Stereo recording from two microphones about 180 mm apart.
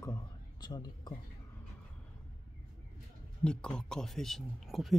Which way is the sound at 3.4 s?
5° left (ahead or behind).